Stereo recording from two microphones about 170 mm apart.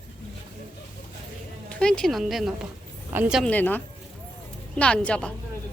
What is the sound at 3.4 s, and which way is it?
Speech, 10° left (ahead or behind).